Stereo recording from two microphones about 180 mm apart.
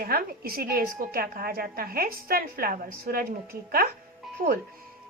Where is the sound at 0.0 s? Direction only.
55° right (ahead or behind).